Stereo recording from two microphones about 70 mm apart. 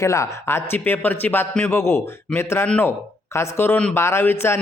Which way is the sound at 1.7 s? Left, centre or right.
Left.